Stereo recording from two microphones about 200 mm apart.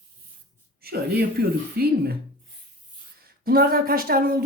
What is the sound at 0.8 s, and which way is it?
A woman's voice, 50° right (ahead or behind).